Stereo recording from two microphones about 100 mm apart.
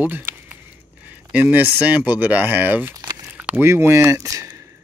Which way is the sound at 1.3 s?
20° right (ahead or behind).